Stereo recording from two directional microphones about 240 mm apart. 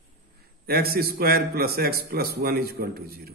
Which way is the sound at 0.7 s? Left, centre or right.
Right.